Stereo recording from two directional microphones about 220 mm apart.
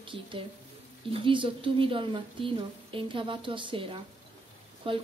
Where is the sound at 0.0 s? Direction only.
20° right (ahead or behind).